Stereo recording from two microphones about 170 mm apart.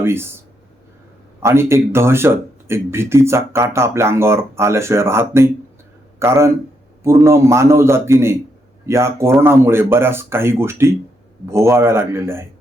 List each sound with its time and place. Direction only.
0.0 s speech: 15° right (ahead or behind)
1.4 s speech: 15° right (ahead or behind)